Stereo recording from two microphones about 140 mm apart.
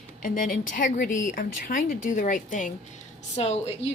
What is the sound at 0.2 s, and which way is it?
A woman's voice, 70° left (ahead or behind).